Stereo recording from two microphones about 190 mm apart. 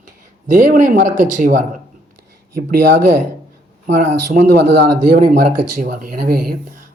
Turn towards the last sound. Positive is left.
turn(degrees=-55)  # may be behind; listen again after turning